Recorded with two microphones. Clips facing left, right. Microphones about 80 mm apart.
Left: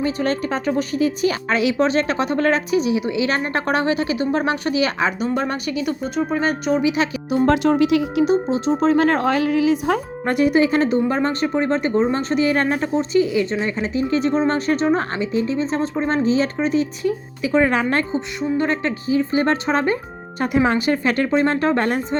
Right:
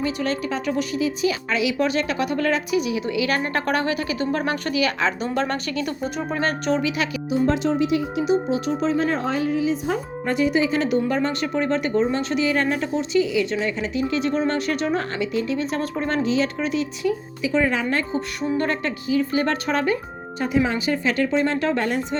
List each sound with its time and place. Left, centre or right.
0.0 s a woman's voice: left
5.2 s speech: centre
7.3 s speech: left
8.2 s a woman's voice: left
9.0 s speech: left
10.8 s a woman's voice: left
18.5 s a woman's voice: left
20.6 s speech: left